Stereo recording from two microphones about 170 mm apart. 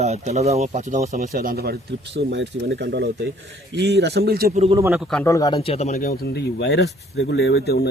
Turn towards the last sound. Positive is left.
turn(degrees=70)  # may be behind; listen again after turning